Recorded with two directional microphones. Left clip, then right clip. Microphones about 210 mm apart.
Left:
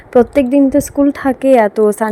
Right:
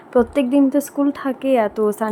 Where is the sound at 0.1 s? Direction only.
20° left (ahead or behind).